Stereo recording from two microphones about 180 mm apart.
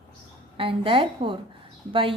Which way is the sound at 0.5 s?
30° right (ahead or behind).